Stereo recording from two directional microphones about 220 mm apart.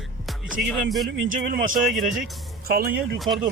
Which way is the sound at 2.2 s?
Centre (ahead or behind).